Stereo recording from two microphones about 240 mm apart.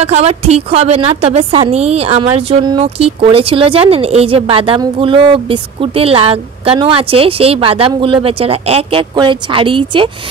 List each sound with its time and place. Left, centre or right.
0.0 s a woman's voice: right